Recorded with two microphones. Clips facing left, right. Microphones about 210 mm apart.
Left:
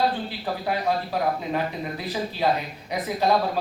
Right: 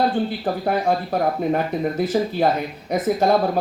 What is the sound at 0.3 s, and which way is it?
Speech, 50° right (ahead or behind).